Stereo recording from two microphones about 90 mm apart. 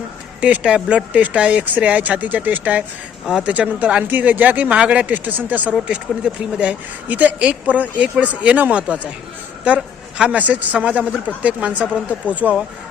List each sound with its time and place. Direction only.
0.4 s speech: 15° right (ahead or behind)